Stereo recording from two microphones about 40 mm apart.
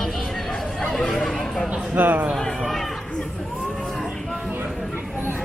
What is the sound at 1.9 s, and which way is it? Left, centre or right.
Speech, right.